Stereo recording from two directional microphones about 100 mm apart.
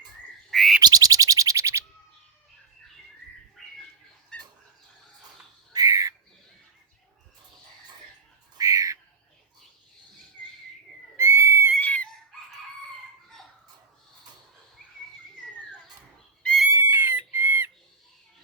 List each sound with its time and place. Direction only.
0.5 s bird: centre (ahead or behind)
0.8 s a sound: 40° right (ahead or behind)
3.6 s bird: 5° left (ahead or behind)
4.3 s dog: 10° left (ahead or behind)
5.7 s bird: 35° right (ahead or behind)
8.5 s bird: 35° right (ahead or behind)
11.2 s a sound: 25° right (ahead or behind)
11.8 s a sound: 15° left (ahead or behind)
16.7 s chicken: 25° right (ahead or behind)